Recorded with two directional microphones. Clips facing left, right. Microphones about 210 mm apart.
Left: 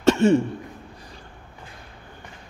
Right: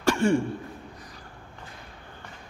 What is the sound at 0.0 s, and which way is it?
Throat clearing, 25° left (ahead or behind).